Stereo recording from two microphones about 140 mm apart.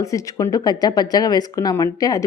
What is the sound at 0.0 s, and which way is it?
A woman's voice, 25° left (ahead or behind).